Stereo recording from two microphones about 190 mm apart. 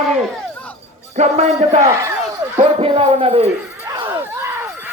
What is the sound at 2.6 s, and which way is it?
Speech, 30° right (ahead or behind).